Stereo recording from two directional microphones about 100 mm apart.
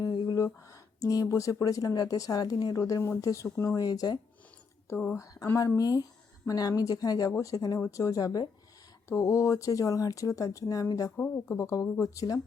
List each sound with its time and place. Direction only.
0.0 s a sound: 45° left (ahead or behind)
1.0 s speech: 35° left (ahead or behind)
2.8 s speech: 30° left (ahead or behind)
4.9 s speech: 25° left (ahead or behind)